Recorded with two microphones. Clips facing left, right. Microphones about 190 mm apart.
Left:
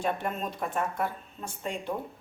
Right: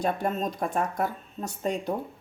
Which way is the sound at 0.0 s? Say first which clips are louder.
Right 4 dB; 40° right (ahead or behind).